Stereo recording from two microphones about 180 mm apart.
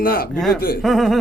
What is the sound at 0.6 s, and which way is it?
Speech, 55° left (ahead or behind).